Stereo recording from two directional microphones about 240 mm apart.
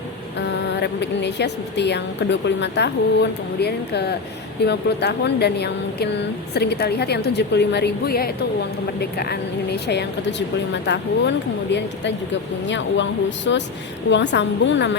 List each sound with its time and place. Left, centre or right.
0.3 s speech: left